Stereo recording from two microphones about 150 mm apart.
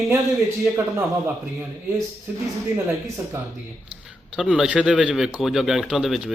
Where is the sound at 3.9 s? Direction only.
5° right (ahead or behind).